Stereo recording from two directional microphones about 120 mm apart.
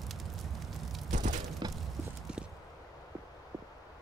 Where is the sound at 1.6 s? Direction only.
35° right (ahead or behind).